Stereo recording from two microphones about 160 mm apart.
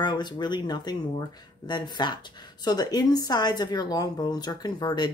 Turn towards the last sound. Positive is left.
turn(degrees=25)  # may be behind; listen again after turning